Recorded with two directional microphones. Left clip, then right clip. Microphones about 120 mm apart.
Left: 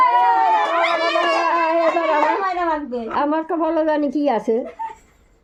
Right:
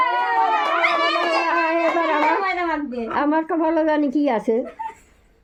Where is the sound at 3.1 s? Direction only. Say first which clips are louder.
Even; 5° left (ahead or behind).